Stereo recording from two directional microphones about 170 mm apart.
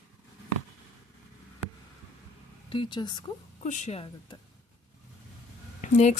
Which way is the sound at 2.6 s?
30° left (ahead or behind).